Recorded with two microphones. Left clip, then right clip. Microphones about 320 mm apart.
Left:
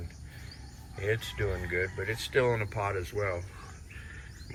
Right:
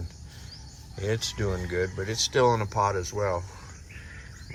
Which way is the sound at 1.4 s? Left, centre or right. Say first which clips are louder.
Right 2 dB; right.